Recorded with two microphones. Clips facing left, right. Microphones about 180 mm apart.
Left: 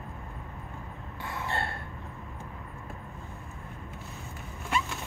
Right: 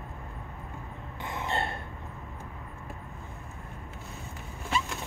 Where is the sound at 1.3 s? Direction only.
20° right (ahead or behind).